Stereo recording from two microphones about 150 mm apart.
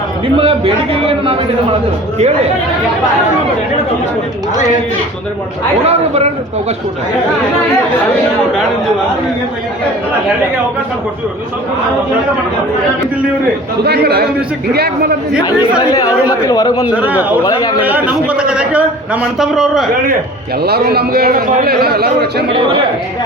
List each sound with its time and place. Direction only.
0.3 s a man's voice: 40° right (ahead or behind)
5.8 s a man's voice: 45° right (ahead or behind)
13.8 s a man's voice: 90° right
15.9 s speech: 25° left (ahead or behind)
16.8 s a man's voice: 10° right (ahead or behind)
17.4 s speech: 30° left (ahead or behind)
17.8 s a man's voice: 10° right (ahead or behind)
20.6 s a man's voice: 90° right